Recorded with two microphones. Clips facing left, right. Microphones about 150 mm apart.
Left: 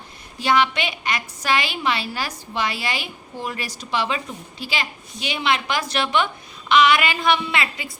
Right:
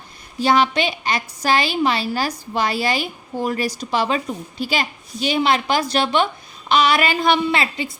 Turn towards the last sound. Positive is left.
turn(degrees=-30)  # may be behind; listen again after turning